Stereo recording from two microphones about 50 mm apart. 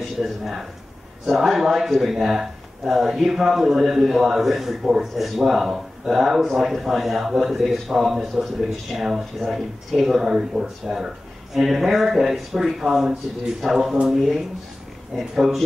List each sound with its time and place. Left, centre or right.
0.2 s speech: centre